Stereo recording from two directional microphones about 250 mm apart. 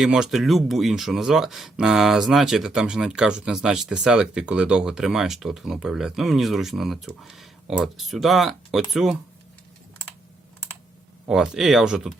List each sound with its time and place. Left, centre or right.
0.0 s speech: centre
11.3 s speech: centre